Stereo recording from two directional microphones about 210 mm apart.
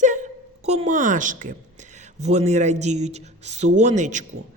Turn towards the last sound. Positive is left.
turn(degrees=-35)  # may be behind; listen again after turning